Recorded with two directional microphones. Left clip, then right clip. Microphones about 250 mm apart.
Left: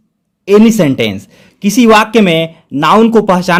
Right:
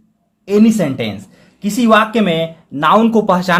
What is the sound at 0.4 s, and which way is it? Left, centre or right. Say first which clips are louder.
A man's voice: left 6 dB; left.